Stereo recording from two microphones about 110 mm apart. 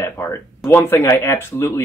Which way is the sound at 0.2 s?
15° left (ahead or behind).